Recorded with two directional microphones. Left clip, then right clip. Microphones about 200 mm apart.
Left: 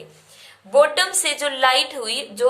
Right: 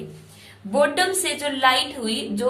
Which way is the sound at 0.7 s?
30° left (ahead or behind).